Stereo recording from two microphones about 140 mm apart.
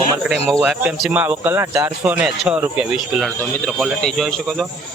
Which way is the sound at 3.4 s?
10° left (ahead or behind).